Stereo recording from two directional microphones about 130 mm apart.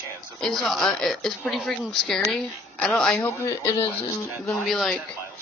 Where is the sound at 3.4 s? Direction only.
25° left (ahead or behind).